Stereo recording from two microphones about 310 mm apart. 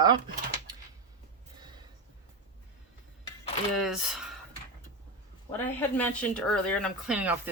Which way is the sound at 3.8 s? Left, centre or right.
Centre.